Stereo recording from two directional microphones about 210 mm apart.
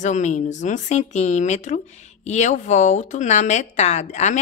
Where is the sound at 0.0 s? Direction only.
35° left (ahead or behind).